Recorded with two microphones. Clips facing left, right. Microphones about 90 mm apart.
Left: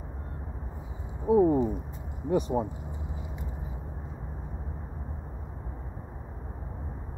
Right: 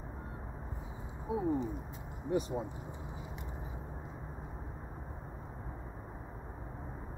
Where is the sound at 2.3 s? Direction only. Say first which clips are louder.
Left 7 dB; 50° left (ahead or behind).